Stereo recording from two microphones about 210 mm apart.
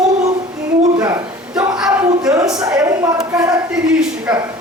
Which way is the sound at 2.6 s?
15° right (ahead or behind).